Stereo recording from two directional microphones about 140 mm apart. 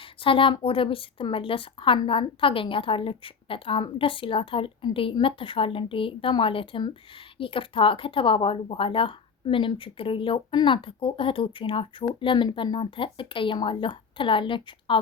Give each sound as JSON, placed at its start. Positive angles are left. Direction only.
{"t": 0.0, "sound": "speech", "side_deg": 40}